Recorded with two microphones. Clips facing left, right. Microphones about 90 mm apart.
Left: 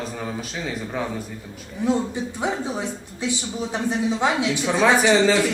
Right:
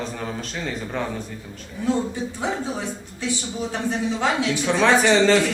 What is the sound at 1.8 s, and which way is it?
A man's voice, 20° left (ahead or behind).